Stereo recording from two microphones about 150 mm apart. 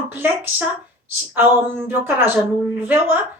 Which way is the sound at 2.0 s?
15° right (ahead or behind).